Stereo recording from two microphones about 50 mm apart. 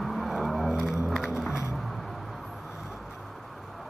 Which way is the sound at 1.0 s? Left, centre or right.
Centre.